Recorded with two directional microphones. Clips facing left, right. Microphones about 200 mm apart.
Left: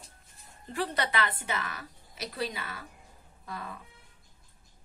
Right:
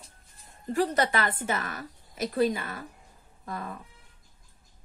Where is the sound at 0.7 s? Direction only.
45° right (ahead or behind).